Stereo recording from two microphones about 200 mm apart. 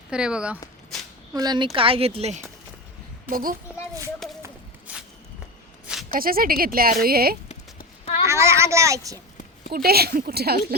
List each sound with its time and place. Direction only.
0.1 s speech: 5° right (ahead or behind)
1.3 s speech: 20° right (ahead or behind)
3.2 s speech: 45° right (ahead or behind)
6.1 s speech: 45° right (ahead or behind)
8.3 s a sound: 15° right (ahead or behind)
9.7 s speech: 50° right (ahead or behind)